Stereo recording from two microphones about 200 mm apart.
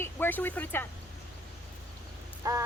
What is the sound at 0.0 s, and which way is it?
Speech, 10° left (ahead or behind).